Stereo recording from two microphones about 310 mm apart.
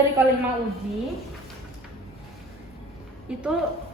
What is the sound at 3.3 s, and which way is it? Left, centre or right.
Speech, centre.